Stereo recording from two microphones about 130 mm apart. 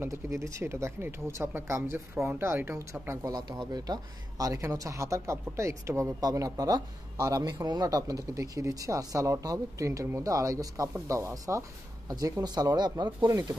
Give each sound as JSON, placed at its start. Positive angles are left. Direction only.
{"t": 0.0, "sound": "speech", "side_deg": -20}